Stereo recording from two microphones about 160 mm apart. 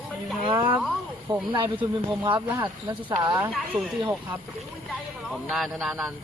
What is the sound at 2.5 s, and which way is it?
Speech, 10° right (ahead or behind).